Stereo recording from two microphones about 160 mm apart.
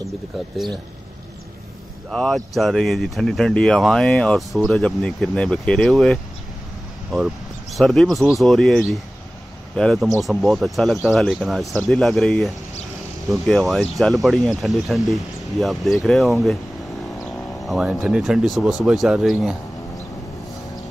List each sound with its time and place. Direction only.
2.0 s speech: centre (ahead or behind)
7.7 s speech: 5° left (ahead or behind)
17.2 s a sound: centre (ahead or behind)
18.0 s speech: 5° right (ahead or behind)